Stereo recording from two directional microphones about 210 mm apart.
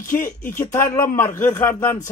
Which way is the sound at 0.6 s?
10° left (ahead or behind).